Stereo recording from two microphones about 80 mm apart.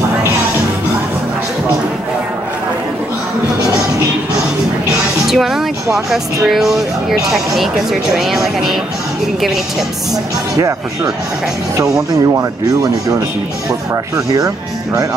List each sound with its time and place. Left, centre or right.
5.2 s music: centre
6.4 s speech: centre
11.7 s speech: right
14.1 s speech: right